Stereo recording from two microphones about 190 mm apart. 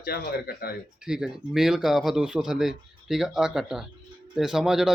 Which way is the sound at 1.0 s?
5° right (ahead or behind).